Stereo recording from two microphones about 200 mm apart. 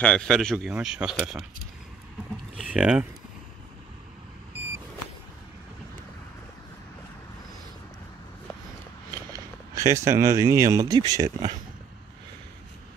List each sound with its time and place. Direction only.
0.0 s speech: 5° left (ahead or behind)
2.6 s speech: 5° right (ahead or behind)
9.3 s speech: 15° right (ahead or behind)